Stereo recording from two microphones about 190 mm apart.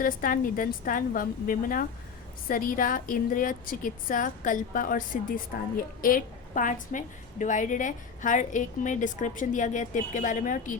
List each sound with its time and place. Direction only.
0.0 s a woman's voice: 45° left (ahead or behind)